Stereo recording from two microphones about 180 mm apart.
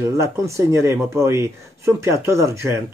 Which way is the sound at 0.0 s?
15° right (ahead or behind).